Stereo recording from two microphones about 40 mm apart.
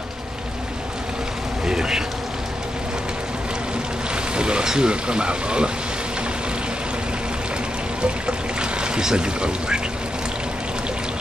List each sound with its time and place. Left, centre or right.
1.7 s insect: centre
4.4 s speech: right
8.0 s pour: right